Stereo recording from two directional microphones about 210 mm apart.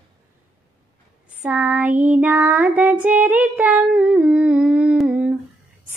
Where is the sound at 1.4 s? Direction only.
5° right (ahead or behind).